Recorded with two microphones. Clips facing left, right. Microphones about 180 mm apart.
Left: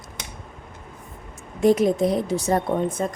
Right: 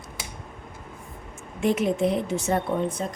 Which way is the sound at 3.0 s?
50° left (ahead or behind).